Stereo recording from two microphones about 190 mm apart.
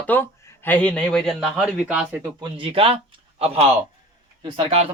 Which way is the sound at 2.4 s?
30° right (ahead or behind).